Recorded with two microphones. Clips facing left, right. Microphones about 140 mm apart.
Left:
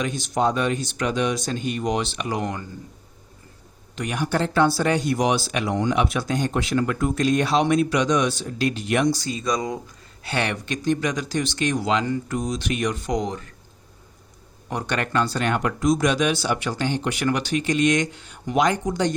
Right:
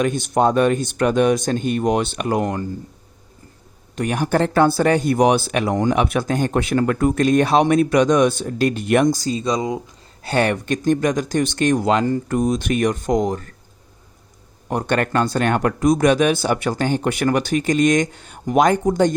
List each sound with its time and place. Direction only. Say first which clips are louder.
0.0 s speech: right 5 dB; 55° right (ahead or behind)
3.9 s speech: right 5 dB; 50° right (ahead or behind)
9.4 s speech: right 4 dB; 25° right (ahead or behind)
10.2 s speech: right 7 dB; 45° right (ahead or behind)
14.7 s speech: right 6 dB; 50° right (ahead or behind)